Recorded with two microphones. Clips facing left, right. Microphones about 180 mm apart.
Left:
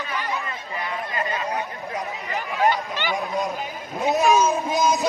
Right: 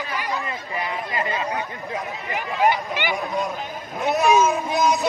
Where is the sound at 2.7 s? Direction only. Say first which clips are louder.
Right 1 dB; 15° right (ahead or behind).